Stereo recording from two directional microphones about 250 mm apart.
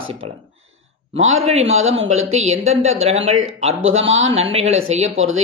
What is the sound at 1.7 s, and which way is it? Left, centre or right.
Speech, right.